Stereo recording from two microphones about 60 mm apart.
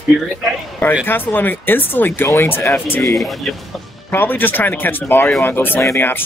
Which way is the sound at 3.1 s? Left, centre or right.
Centre.